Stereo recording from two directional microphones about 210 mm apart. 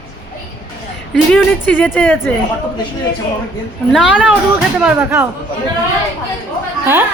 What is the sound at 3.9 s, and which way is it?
A woman's voice, centre (ahead or behind).